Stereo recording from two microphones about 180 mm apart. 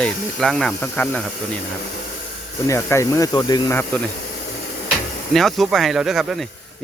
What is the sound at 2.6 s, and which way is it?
Speech, 15° left (ahead or behind).